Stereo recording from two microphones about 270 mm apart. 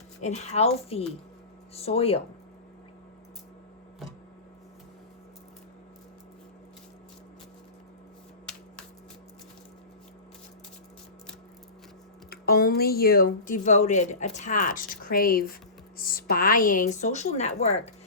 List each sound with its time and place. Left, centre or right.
0.2 s a woman's voice: left
12.3 s a woman's voice: left